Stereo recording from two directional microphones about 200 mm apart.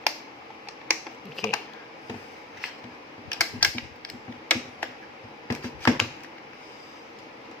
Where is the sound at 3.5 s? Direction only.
5° left (ahead or behind).